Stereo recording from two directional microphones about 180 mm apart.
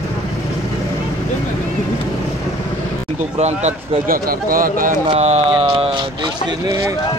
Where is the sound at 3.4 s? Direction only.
40° right (ahead or behind).